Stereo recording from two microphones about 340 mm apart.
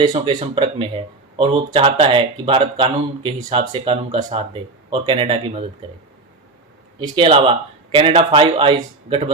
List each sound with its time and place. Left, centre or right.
0.0 s speech: centre
7.0 s speech: centre